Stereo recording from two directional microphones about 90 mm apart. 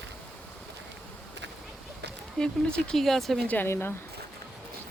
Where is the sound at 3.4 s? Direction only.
20° left (ahead or behind).